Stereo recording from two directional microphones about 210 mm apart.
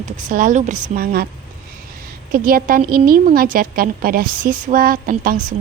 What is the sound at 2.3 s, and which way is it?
A woman's voice, 45° right (ahead or behind).